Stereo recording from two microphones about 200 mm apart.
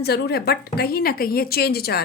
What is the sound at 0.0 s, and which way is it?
A woman's voice, 55° left (ahead or behind).